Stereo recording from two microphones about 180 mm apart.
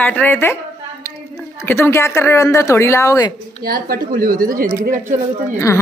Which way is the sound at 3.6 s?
55° right (ahead or behind).